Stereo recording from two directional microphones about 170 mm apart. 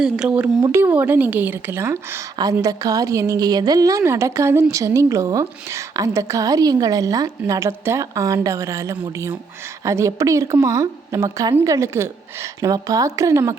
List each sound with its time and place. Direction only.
0.0 s a woman's voice: 5° right (ahead or behind)